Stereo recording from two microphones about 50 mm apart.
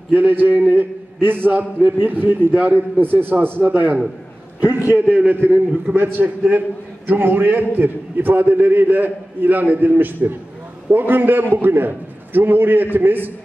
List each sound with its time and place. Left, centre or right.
0.1 s a man's voice: right
5.5 s a man's voice: right